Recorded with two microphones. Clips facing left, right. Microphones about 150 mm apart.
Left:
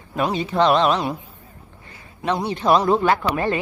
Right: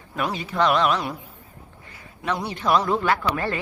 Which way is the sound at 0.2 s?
25° left (ahead or behind).